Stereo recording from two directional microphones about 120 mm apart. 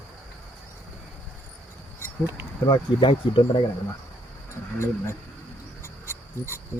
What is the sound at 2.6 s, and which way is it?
Speech, 40° left (ahead or behind).